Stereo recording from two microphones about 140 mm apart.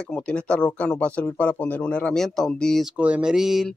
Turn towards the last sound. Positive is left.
turn(degrees=0)  # may be behind; listen again after turning